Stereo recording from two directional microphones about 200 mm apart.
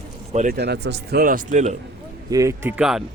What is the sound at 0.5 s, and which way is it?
Speech, 55° right (ahead or behind).